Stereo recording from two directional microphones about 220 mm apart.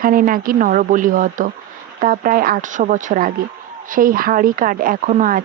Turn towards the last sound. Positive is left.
turn(degrees=-35)  # may be behind; listen again after turning